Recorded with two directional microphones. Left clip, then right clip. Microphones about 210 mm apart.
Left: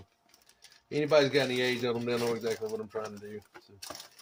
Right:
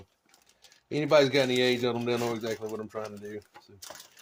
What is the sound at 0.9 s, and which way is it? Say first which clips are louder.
A man's voice: right 2 dB; 40° right (ahead or behind).